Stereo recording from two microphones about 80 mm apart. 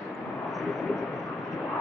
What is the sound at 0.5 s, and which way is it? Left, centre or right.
Vehicle, centre.